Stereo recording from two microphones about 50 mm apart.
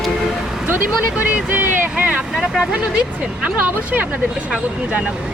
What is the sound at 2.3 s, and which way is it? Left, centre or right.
Speech, centre.